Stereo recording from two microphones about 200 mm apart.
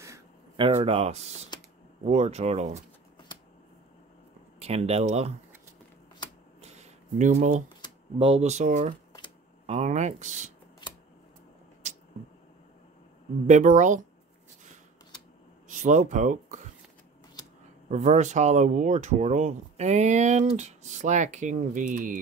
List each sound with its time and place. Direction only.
0.6 s speech: 30° right (ahead or behind)
4.6 s speech: 30° right (ahead or behind)
6.6 s a sound: 35° right (ahead or behind)
8.2 s speech: 30° right (ahead or behind)
10.8 s a sound: 20° left (ahead or behind)
13.5 s speech: 40° right (ahead or behind)
15.7 s speech: 40° right (ahead or behind)
17.8 s speech: 35° right (ahead or behind)